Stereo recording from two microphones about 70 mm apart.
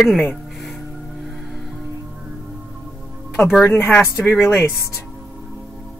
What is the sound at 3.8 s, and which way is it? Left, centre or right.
Speech, left.